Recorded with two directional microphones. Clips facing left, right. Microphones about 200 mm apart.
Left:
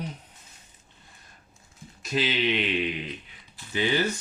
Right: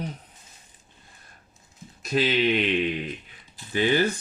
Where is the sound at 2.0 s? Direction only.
50° right (ahead or behind).